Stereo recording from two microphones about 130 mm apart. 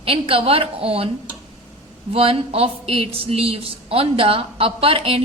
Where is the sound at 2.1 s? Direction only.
50° right (ahead or behind).